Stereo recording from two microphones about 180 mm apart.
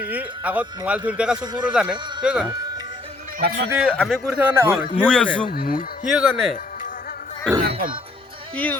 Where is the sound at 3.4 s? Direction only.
60° right (ahead or behind).